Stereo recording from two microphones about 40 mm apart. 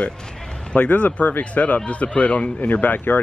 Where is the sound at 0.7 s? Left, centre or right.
Left.